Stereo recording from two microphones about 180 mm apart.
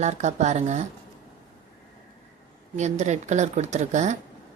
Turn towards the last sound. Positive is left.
turn(degrees=-40)  # may be behind; listen again after turning